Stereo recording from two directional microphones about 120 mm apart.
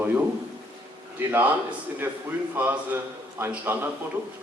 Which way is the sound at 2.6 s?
15° right (ahead or behind).